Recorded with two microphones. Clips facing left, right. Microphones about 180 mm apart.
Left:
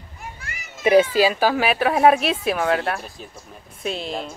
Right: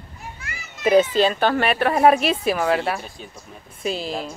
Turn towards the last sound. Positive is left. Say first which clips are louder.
# right 1 dB
turn(degrees=0)  # may be behind; listen again after turning